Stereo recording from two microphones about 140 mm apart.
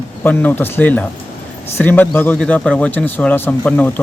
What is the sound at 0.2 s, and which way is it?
Speech, 15° left (ahead or behind).